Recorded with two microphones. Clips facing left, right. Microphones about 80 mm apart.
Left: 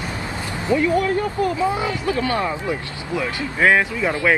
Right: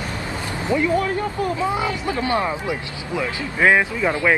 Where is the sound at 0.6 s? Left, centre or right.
Right.